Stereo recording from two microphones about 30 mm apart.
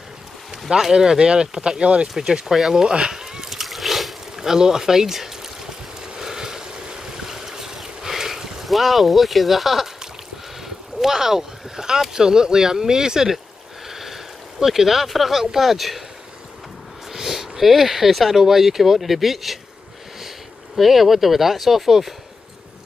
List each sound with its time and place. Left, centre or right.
0.9 s speech: right
1.8 s speech: right
2.1 s speech: centre
2.7 s a sound: centre
3.6 s splash: centre
4.6 s a sound: centre
8.6 s speech: centre
11.0 s speech: centre
13.8 s speech: centre
17.1 s speech: centre